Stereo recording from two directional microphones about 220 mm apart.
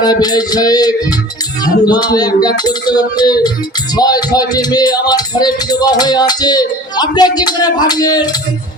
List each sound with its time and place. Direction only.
0.0 s music: 15° left (ahead or behind)